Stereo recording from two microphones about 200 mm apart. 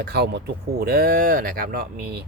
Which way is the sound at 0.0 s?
55° right (ahead or behind).